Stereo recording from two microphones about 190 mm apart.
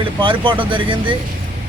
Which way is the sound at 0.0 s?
25° right (ahead or behind).